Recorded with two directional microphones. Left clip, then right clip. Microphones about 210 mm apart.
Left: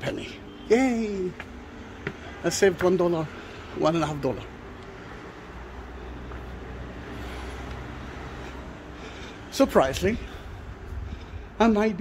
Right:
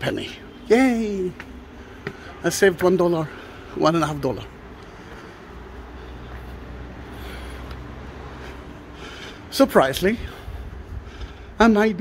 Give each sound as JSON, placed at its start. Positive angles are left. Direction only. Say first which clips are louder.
{"t": 0.0, "sound": "a woman's voice", "louder": "right 5 dB", "side_deg": -25}
{"t": 9.5, "sound": "a man's voice", "louder": "right 4 dB", "side_deg": -20}
{"t": 11.5, "sound": "speech", "louder": "right 5 dB", "side_deg": -25}